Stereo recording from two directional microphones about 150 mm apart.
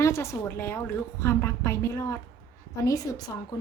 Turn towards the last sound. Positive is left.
turn(degrees=25)  # may be behind; listen again after turning